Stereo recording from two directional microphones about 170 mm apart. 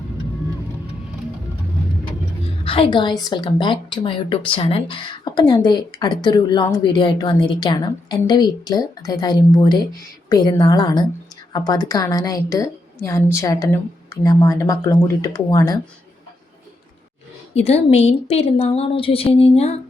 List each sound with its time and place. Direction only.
2.6 s a woman's voice: 30° left (ahead or behind)
17.5 s a woman's voice: 40° left (ahead or behind)